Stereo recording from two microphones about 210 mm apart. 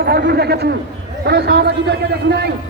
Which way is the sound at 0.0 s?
45° right (ahead or behind).